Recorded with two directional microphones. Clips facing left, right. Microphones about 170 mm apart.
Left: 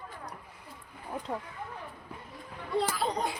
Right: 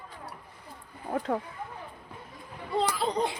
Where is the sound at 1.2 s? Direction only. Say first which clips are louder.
Right 7 dB; 60° right (ahead or behind).